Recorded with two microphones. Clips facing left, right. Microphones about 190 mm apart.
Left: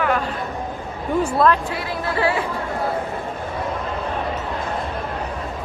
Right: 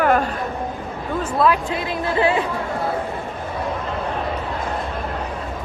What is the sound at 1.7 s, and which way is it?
Speech, 20° right (ahead or behind).